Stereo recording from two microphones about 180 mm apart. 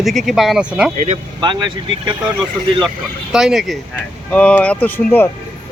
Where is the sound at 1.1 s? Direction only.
25° right (ahead or behind).